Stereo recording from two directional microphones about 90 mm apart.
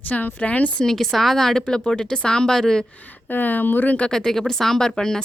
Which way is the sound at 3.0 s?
20° left (ahead or behind).